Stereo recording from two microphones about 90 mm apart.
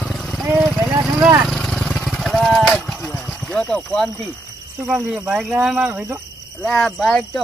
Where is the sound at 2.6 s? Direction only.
10° left (ahead or behind).